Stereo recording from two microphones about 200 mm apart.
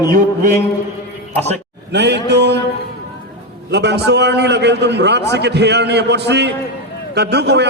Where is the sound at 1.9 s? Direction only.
60° right (ahead or behind).